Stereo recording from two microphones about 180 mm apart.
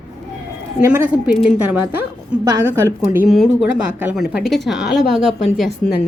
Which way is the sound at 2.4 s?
15° right (ahead or behind).